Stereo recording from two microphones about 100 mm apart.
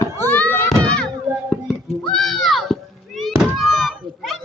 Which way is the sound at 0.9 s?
10° left (ahead or behind).